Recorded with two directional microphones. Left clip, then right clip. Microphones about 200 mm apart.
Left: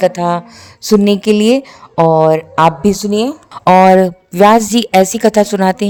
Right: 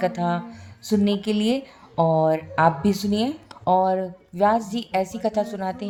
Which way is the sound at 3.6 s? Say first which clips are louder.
Left 14 dB; 60° left (ahead or behind).